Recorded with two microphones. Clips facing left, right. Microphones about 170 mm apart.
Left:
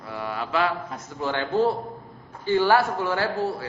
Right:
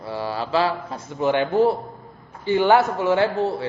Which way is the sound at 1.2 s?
20° right (ahead or behind).